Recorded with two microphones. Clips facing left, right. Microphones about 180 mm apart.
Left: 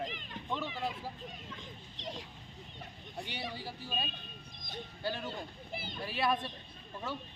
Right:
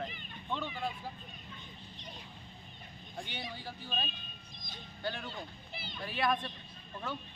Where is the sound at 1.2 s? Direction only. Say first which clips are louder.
Left 5 dB; 90° left.